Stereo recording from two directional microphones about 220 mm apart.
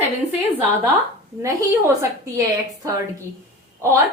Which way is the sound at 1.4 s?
15° right (ahead or behind).